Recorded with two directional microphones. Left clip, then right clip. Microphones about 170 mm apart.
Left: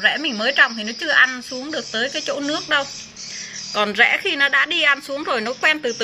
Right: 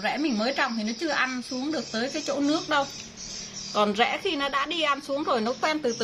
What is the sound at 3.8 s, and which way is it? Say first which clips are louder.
A woman's voice: left 7 dB; 5° right (ahead or behind).